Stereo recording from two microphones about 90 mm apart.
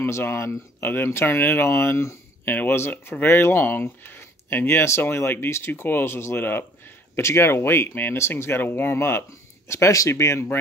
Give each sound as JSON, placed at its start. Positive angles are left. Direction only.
{"t": 0.0, "sound": "speech", "side_deg": 30}